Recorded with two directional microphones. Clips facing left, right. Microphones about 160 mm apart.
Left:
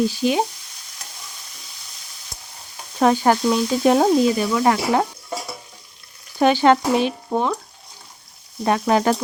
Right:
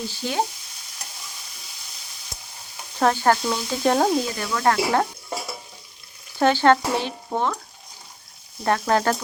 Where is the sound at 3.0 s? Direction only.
15° left (ahead or behind).